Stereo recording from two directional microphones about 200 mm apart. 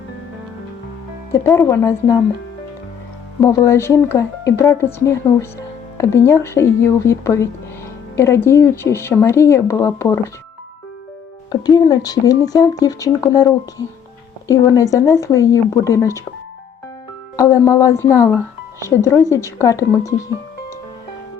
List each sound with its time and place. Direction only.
1.3 s speech: 15° left (ahead or behind)
3.4 s speech: 15° left (ahead or behind)
11.6 s speech: 20° left (ahead or behind)
17.3 s speech: 15° left (ahead or behind)